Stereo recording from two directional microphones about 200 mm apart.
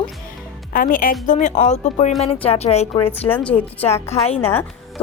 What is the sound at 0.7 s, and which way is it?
A woman's voice, 45° left (ahead or behind).